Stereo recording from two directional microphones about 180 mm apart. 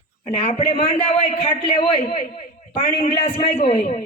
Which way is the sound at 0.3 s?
35° left (ahead or behind).